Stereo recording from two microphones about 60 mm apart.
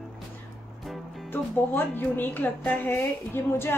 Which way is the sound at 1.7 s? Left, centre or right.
Left.